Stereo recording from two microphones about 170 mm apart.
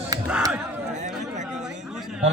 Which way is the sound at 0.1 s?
20° right (ahead or behind).